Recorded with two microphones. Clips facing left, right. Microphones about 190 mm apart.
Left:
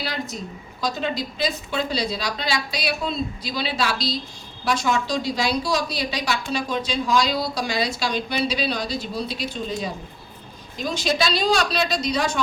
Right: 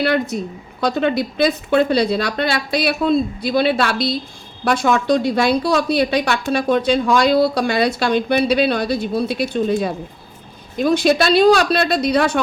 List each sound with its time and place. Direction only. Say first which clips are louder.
0.0 s a woman's voice: right 11 dB; 60° right (ahead or behind)